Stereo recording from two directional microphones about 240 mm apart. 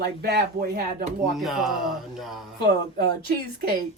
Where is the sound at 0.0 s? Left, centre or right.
Right.